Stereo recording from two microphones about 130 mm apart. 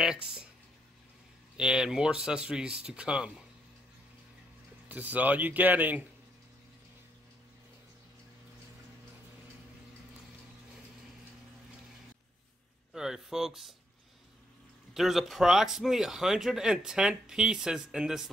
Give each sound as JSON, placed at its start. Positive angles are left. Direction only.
{"t": 0.0, "sound": "a sound", "side_deg": -5}
{"t": 1.6, "sound": "speech", "side_deg": -5}
{"t": 4.8, "sound": "speech", "side_deg": -10}
{"t": 12.9, "sound": "speech", "side_deg": -5}
{"t": 15.0, "sound": "speech", "side_deg": 0}